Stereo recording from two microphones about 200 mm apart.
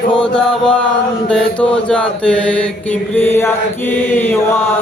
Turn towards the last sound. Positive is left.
turn(degrees=10)  # may be behind; listen again after turning